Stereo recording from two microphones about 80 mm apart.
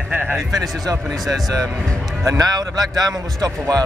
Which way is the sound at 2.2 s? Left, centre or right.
Right.